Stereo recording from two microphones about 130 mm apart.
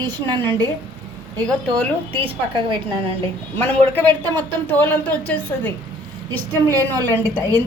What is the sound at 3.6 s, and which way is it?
A woman's voice, 15° left (ahead or behind).